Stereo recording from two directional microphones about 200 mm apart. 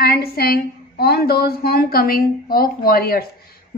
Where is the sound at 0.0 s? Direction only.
50° left (ahead or behind).